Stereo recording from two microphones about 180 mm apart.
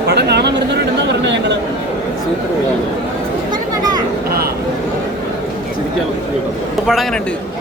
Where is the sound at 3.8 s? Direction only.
20° right (ahead or behind).